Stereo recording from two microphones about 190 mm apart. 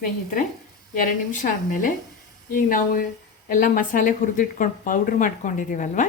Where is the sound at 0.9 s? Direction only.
45° left (ahead or behind).